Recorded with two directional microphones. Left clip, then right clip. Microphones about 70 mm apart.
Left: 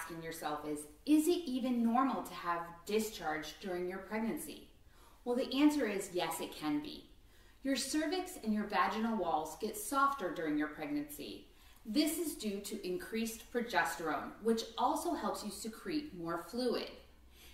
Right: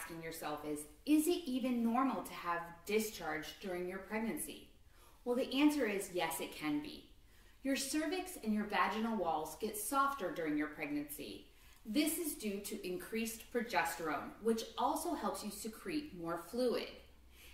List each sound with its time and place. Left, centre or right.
0.2 s a woman's voice: centre
5.2 s a woman's voice: centre